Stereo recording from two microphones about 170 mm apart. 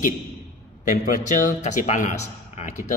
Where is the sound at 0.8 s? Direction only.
50° left (ahead or behind).